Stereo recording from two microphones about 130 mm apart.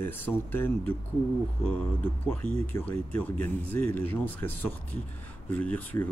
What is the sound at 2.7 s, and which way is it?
Speech, 15° left (ahead or behind).